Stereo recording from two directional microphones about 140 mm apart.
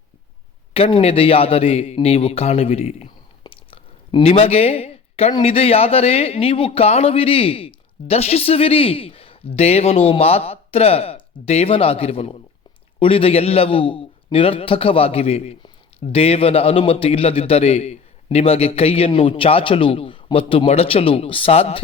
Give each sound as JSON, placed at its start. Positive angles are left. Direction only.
{"t": 0.7, "sound": "speech", "side_deg": 40}
{"t": 3.4, "sound": "a sound", "side_deg": 35}
{"t": 5.4, "sound": "speech", "side_deg": 45}